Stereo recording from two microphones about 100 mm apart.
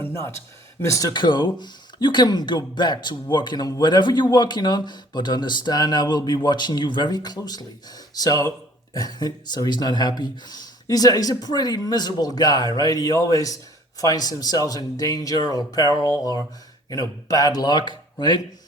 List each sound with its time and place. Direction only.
0.0 s a sound: 25° left (ahead or behind)
0.8 s speech: 30° left (ahead or behind)
1.1 s speech: 50° left (ahead or behind)